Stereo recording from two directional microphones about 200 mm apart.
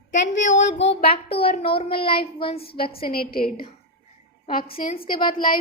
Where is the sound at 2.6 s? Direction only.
50° left (ahead or behind).